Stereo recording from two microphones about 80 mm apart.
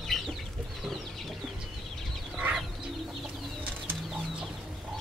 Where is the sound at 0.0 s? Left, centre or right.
Centre.